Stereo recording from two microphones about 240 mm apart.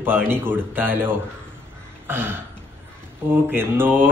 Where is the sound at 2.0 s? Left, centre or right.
Centre.